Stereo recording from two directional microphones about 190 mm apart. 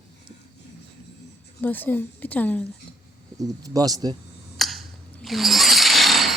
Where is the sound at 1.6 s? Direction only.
10° left (ahead or behind).